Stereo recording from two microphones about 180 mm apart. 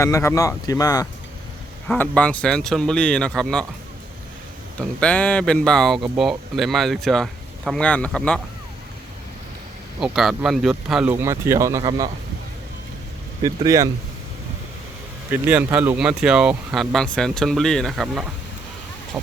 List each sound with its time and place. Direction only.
0.0 s speech: 15° left (ahead or behind)
1.9 s speech: 5° left (ahead or behind)
4.8 s speech: 5° left (ahead or behind)
10.0 s speech: centre (ahead or behind)
11.1 s speech: 15° right (ahead or behind)
13.4 s speech: 20° right (ahead or behind)
15.3 s speech: 10° right (ahead or behind)